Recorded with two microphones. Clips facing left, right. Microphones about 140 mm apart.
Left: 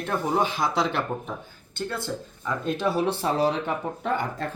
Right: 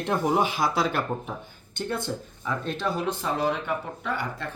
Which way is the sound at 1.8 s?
20° right (ahead or behind).